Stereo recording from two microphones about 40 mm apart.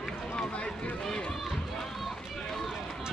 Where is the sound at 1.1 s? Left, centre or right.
Left.